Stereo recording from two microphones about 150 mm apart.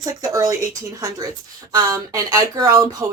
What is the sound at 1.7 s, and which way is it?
Speech, 25° right (ahead or behind).